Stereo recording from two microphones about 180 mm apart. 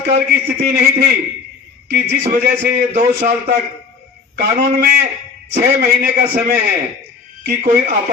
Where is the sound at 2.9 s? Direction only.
45° right (ahead or behind).